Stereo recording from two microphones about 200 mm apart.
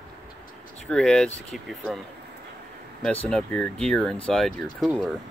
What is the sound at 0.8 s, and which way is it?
Speech, 5° left (ahead or behind).